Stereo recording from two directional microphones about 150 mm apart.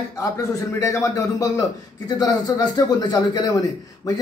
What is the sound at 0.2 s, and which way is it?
A man's voice, 20° left (ahead or behind).